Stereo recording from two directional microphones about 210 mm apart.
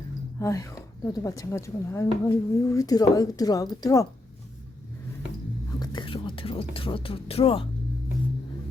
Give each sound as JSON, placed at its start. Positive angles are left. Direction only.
{"t": 0.3, "sound": "speech", "side_deg": 15}
{"t": 5.8, "sound": "whispering", "side_deg": 20}